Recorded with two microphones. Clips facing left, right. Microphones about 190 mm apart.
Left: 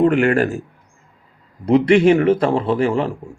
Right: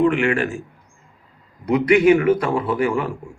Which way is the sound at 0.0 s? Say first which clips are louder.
Left 3 dB; 40° left (ahead or behind).